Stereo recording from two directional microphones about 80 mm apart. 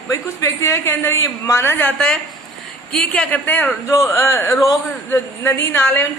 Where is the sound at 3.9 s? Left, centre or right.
Left.